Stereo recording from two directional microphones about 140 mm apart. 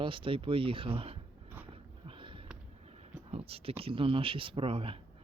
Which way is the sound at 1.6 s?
40° right (ahead or behind).